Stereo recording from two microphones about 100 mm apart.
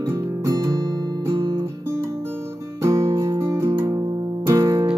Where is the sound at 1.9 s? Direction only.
30° right (ahead or behind).